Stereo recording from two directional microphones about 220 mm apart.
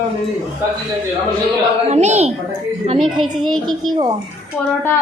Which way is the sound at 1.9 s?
30° right (ahead or behind).